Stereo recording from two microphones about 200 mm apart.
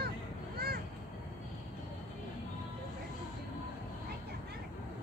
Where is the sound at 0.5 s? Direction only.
50° right (ahead or behind).